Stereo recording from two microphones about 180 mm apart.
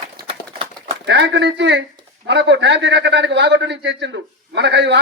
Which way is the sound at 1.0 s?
85° right.